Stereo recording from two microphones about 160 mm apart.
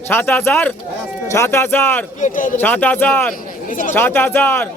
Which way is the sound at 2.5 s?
10° left (ahead or behind).